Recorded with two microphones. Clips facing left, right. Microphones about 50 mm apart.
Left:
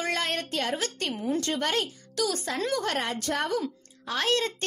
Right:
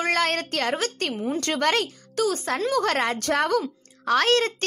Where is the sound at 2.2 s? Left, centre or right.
Right.